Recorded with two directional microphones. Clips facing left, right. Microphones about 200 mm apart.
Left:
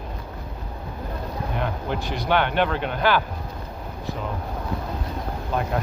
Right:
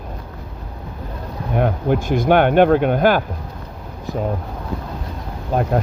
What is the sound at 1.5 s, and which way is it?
Speech, 50° right (ahead or behind).